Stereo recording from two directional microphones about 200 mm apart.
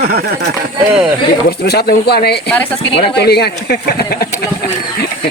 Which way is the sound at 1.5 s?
50° left (ahead or behind).